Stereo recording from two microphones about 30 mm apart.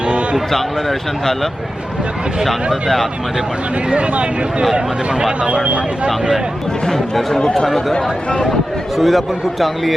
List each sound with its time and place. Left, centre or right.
0.5 s speech: centre
3.8 s speech: right
7.3 s speech: left
9.0 s a man's voice: centre